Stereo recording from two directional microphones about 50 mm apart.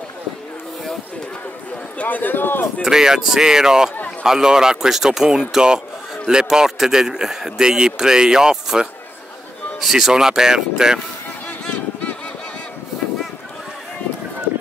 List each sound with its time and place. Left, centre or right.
2.0 s a man's voice: left
2.8 s a man's voice: centre